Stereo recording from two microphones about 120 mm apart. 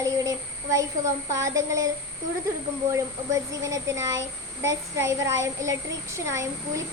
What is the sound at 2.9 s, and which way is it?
A child's voice, 25° right (ahead or behind).